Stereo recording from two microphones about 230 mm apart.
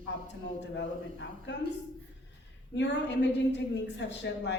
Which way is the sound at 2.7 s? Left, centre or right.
Left.